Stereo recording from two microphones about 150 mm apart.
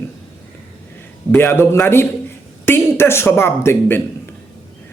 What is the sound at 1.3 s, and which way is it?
Speech, 15° left (ahead or behind).